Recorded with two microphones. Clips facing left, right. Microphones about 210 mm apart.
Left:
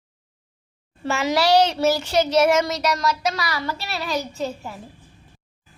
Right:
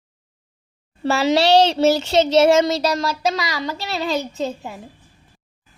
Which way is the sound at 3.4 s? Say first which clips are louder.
Right 2 dB; 15° right (ahead or behind).